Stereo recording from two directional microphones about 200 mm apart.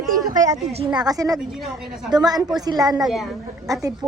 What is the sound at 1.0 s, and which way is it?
A woman's voice, 20° right (ahead or behind).